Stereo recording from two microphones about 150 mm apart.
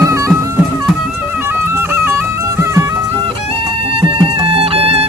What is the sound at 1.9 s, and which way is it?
Music, 15° right (ahead or behind).